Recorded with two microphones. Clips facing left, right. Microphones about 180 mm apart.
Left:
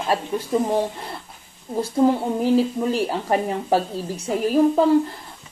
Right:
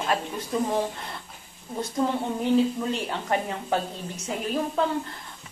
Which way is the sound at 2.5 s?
30° left (ahead or behind).